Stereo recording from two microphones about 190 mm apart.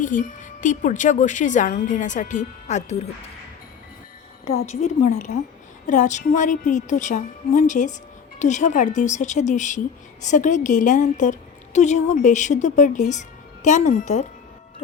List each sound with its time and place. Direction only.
0.0 s a woman's voice: 45° left (ahead or behind)
4.4 s a woman's voice: 35° left (ahead or behind)